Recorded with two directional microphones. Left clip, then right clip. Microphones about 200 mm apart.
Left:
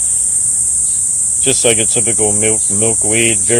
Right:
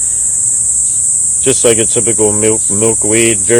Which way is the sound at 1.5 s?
15° right (ahead or behind).